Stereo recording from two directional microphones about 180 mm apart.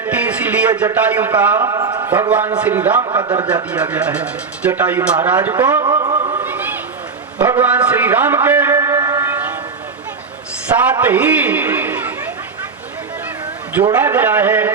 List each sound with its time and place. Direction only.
0.0 s a sound: 10° right (ahead or behind)
0.8 s speech: 10° right (ahead or behind)
3.0 s a man's voice: 25° right (ahead or behind)
3.4 s speech: 5° right (ahead or behind)
5.8 s a sound: 20° right (ahead or behind)
10.7 s a man's voice: 15° right (ahead or behind)
13.9 s speech: 10° right (ahead or behind)